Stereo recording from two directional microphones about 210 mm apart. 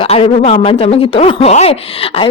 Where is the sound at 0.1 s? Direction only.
30° left (ahead or behind).